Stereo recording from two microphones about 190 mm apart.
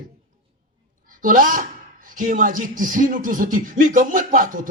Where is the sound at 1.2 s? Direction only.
45° right (ahead or behind).